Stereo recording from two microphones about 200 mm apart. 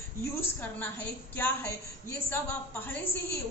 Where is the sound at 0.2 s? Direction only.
10° left (ahead or behind).